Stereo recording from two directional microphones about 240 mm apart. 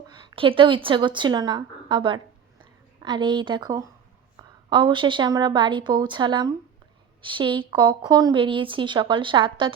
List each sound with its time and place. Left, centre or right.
0.1 s a woman's voice: centre